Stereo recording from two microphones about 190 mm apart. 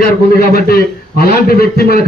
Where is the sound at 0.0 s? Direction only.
50° left (ahead or behind).